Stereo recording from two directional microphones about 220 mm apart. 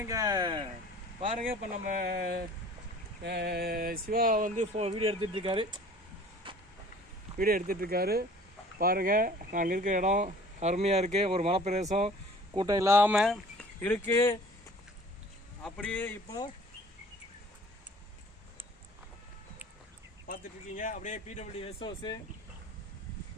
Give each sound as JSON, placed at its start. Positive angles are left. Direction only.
{"t": 0.0, "sound": "speech", "side_deg": -15}
{"t": 1.4, "sound": "speech", "side_deg": -40}
{"t": 7.3, "sound": "speech", "side_deg": -40}
{"t": 12.5, "sound": "speech", "side_deg": -15}
{"t": 15.6, "sound": "speech", "side_deg": 5}
{"t": 20.2, "sound": "speech", "side_deg": 40}